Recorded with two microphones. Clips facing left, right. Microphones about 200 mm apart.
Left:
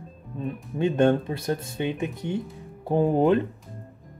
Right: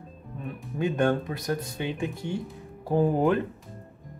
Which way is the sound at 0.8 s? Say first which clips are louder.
Left 4 dB; 25° left (ahead or behind).